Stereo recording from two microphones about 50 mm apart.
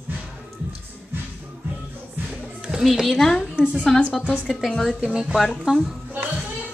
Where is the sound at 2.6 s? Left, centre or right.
Centre.